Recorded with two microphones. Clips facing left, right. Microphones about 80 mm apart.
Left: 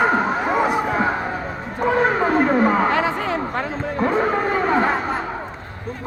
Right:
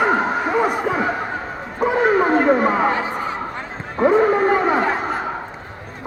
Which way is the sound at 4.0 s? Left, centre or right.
Centre.